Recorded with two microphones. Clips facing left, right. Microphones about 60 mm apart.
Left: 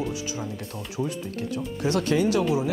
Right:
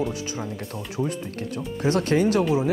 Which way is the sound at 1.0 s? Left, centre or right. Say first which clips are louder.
Right 2 dB; centre.